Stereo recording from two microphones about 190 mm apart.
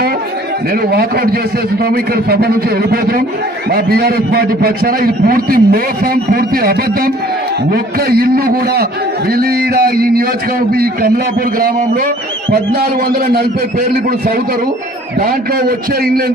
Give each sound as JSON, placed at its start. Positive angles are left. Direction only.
{"t": 1.8, "sound": "a man's voice", "side_deg": -55}
{"t": 12.5, "sound": "a man's voice", "side_deg": -55}
{"t": 15.2, "sound": "a man's voice", "side_deg": -50}